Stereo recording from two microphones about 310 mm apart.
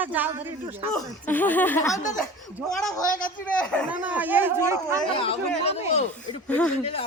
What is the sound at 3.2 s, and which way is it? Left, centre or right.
Speech, centre.